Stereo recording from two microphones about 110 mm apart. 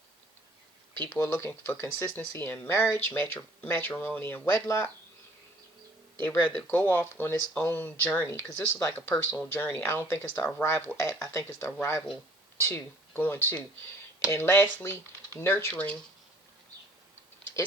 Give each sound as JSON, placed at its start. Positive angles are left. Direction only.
{"t": 1.2, "sound": "speech", "side_deg": 25}
{"t": 6.6, "sound": "speech", "side_deg": 15}